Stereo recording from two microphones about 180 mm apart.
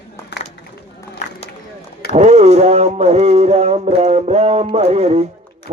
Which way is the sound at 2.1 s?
35° right (ahead or behind).